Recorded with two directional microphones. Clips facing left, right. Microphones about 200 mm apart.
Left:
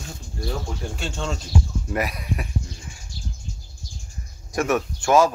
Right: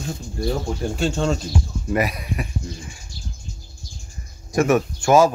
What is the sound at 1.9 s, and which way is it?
Speech, 5° right (ahead or behind).